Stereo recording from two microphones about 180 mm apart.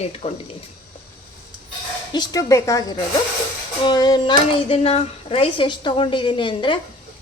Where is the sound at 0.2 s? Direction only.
35° left (ahead or behind).